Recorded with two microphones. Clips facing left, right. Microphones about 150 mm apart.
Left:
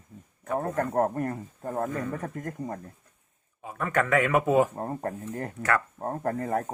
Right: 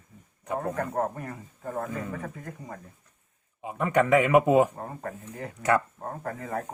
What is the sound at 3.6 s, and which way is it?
Speech, 15° right (ahead or behind).